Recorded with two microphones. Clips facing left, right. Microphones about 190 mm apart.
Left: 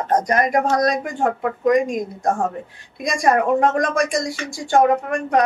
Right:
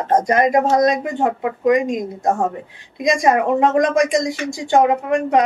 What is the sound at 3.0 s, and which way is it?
A woman's voice, 20° right (ahead or behind).